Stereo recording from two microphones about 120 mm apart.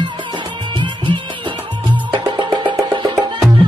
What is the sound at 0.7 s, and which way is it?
Music, 40° right (ahead or behind).